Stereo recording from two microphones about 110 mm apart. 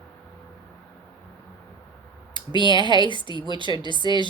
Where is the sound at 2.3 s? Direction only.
45° left (ahead or behind).